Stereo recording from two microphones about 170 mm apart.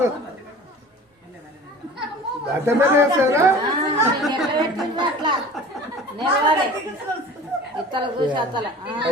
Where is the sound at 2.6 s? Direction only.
15° right (ahead or behind).